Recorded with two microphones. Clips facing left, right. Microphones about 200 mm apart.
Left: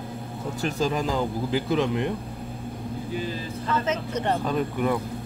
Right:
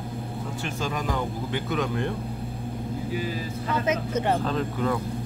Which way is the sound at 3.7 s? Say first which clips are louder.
Right 1 dB; 10° right (ahead or behind).